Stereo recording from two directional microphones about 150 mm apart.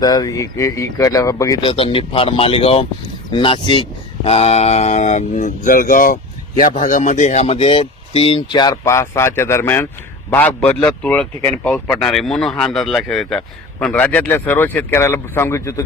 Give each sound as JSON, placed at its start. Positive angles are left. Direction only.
{"t": 0.0, "sound": "speech", "side_deg": 25}
{"t": 1.6, "sound": "speech", "side_deg": 35}
{"t": 6.7, "sound": "a man's voice", "side_deg": 55}